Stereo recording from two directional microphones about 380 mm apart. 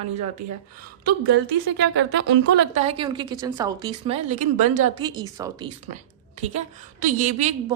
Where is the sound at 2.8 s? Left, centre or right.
Centre.